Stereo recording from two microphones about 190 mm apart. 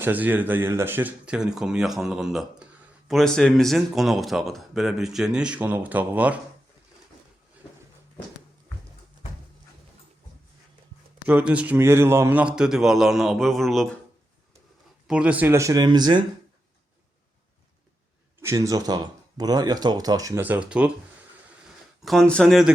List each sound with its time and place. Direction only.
0.0 s speech: 10° right (ahead or behind)
11.3 s speech: 5° right (ahead or behind)
15.0 s speech: 5° right (ahead or behind); by 16.2 s 20° right (ahead or behind)
18.3 s speech: 15° right (ahead or behind)
22.0 s speech: centre (ahead or behind)